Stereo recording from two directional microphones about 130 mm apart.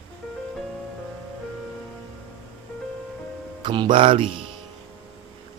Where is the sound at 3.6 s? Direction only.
35° right (ahead or behind).